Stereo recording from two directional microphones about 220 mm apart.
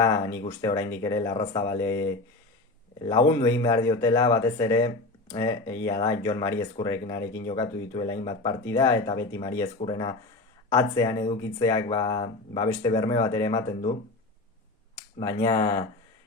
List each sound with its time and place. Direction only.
0.4 s speech: 15° left (ahead or behind)
15.2 s speech: 15° left (ahead or behind)